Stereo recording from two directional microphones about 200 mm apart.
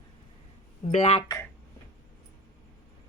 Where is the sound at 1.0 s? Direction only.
30° left (ahead or behind).